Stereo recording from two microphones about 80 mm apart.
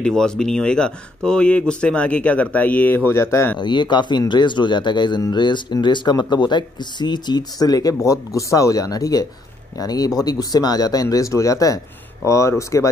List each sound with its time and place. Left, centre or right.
0.0 s speech: centre; by 3.5 s left
3.5 s speech: left